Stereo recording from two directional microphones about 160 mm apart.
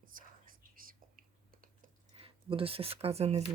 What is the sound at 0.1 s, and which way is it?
Whispering, 55° right (ahead or behind).